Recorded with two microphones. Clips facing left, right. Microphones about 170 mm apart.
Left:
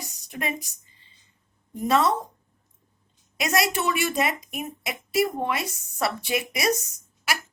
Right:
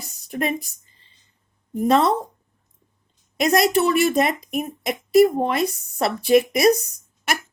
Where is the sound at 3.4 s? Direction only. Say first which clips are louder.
Right 7 dB; 35° right (ahead or behind).